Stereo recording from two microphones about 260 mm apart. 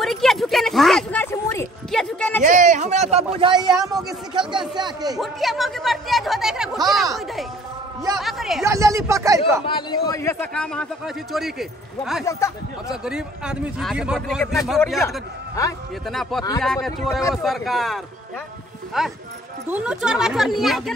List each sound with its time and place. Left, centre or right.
0.0 s bow-wow: centre
2.4 s speech: right
5.2 s speech: centre
8.2 s speech: centre
8.6 s speech: centre
9.7 s a man's voice: centre
12.0 s speech: centre
12.3 s a man's voice: centre
13.0 s speech: centre
15.0 s a man's voice: centre
16.1 s speech: centre